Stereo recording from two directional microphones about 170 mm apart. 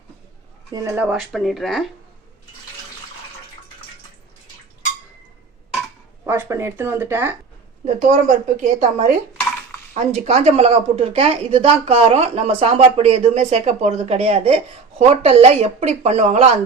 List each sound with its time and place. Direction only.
0.7 s speech: 20° right (ahead or behind)
1.1 s speech: centre (ahead or behind)
6.2 s speech: 15° right (ahead or behind)
8.0 s a woman's voice: 45° right (ahead or behind)